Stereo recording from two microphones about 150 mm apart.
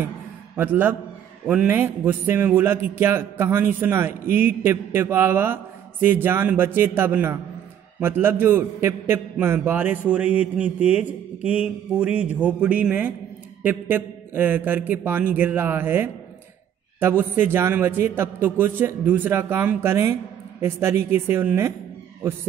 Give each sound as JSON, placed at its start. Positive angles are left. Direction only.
{"t": 0.6, "sound": "a man's voice", "side_deg": -10}